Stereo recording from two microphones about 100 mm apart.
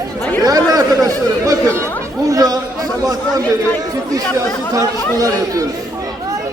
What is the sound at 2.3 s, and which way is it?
Speech, 35° right (ahead or behind).